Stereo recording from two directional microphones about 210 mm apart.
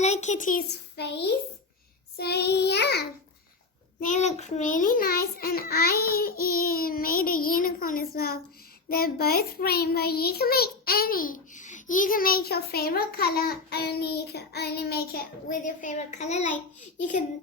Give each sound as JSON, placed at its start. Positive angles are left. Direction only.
{"t": 0.0, "sound": "a child's voice", "side_deg": 35}
{"t": 4.0, "sound": "a child's voice", "side_deg": 35}